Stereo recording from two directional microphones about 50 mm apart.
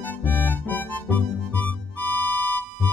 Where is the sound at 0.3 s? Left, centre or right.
Left.